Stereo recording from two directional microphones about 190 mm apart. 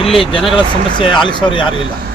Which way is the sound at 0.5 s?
25° left (ahead or behind).